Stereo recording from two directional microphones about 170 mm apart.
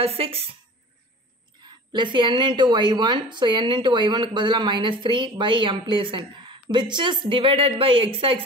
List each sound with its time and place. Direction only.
0.0 s speech: 35° right (ahead or behind)
1.7 s a woman's voice: 25° right (ahead or behind)